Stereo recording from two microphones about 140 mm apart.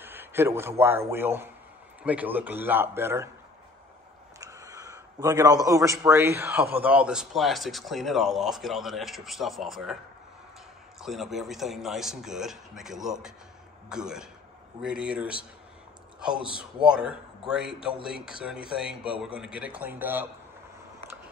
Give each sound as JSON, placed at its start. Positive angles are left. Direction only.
{"t": 0.0, "sound": "a man's voice", "side_deg": -15}
{"t": 4.4, "sound": "a man's voice", "side_deg": -25}
{"t": 11.0, "sound": "a man's voice", "side_deg": 0}